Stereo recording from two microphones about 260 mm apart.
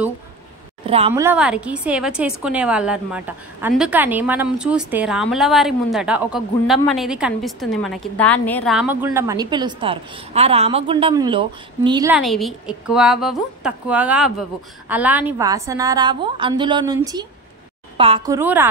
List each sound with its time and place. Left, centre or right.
0.8 s a woman's voice: right
1.2 s a woman's voice: centre
12.1 s a woman's voice: centre